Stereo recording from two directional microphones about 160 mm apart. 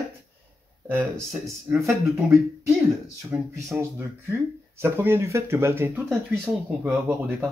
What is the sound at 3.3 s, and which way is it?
Speech, 15° right (ahead or behind).